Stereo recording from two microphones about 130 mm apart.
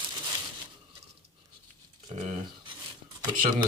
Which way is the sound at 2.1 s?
60° right (ahead or behind).